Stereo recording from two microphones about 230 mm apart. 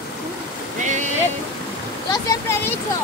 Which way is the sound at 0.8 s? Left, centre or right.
Right.